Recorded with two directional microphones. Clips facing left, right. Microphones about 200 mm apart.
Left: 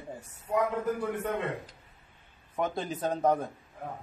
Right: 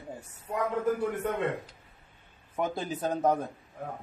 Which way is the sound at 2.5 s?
5° right (ahead or behind).